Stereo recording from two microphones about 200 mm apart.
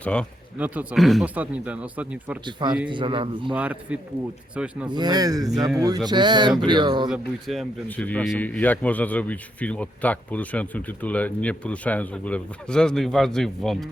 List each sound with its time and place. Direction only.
0.0 s speech: 5° left (ahead or behind)
2.9 s a man's voice: 25° right (ahead or behind)
3.5 s speech: 5° right (ahead or behind)
4.9 s a man's voice: 20° right (ahead or behind)
7.1 s speech: centre (ahead or behind)